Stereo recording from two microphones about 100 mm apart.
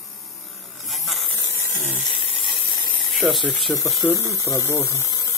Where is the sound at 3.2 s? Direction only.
5° right (ahead or behind).